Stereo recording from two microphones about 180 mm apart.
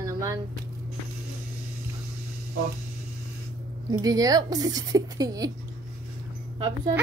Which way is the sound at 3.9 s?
20° right (ahead or behind).